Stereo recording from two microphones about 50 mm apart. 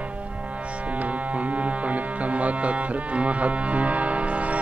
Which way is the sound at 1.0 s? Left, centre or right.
Right.